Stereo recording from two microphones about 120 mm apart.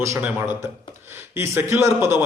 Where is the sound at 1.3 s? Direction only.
20° right (ahead or behind).